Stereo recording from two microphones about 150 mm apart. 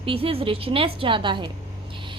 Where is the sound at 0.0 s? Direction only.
40° right (ahead or behind).